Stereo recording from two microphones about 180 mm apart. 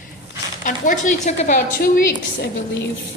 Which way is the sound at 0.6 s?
45° left (ahead or behind).